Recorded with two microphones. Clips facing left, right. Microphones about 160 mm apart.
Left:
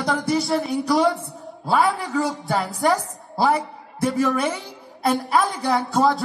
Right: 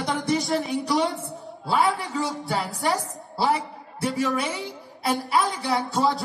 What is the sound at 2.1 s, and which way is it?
A man's voice, 45° left (ahead or behind).